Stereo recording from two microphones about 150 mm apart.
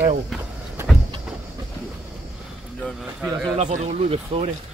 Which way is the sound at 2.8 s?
Centre (ahead or behind).